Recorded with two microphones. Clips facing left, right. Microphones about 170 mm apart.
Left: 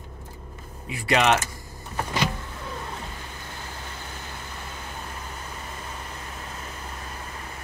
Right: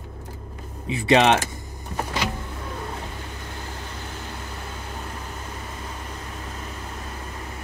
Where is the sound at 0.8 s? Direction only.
25° right (ahead or behind).